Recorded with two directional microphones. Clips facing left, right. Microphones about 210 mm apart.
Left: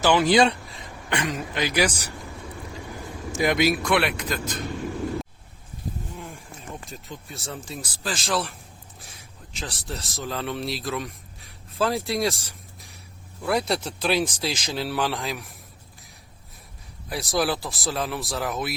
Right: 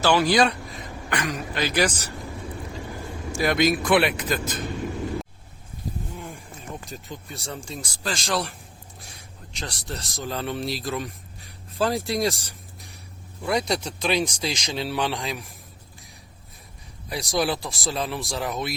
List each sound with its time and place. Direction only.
0.0 s speech: 20° left (ahead or behind)
1.6 s a man's voice: 10° left (ahead or behind)
3.3 s a man's voice: 15° left (ahead or behind)
3.7 s speech: centre (ahead or behind)
6.1 s a sound: centre (ahead or behind)
6.8 s a man's voice: centre (ahead or behind)
17.1 s speech: centre (ahead or behind)